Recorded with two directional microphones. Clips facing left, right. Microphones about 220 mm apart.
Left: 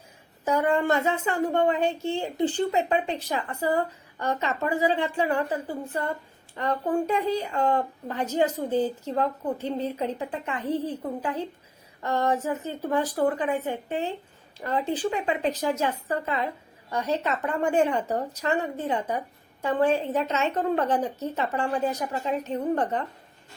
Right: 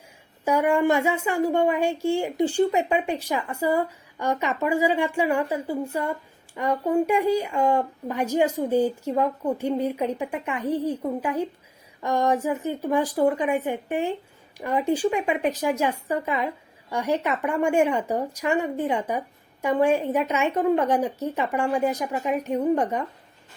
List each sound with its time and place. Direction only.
0.4 s a woman's voice: 10° right (ahead or behind)